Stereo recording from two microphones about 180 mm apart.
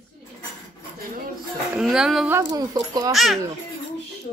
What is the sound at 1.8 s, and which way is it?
Speech, centre (ahead or behind).